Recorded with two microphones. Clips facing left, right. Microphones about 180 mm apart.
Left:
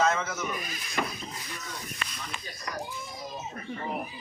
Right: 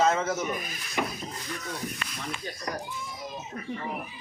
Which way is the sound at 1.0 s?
10° right (ahead or behind).